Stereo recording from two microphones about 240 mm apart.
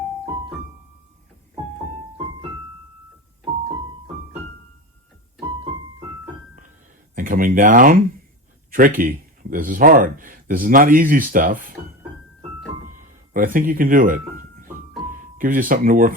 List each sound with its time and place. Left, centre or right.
7.2 s speech: right
13.3 s speech: right
14.7 s music: right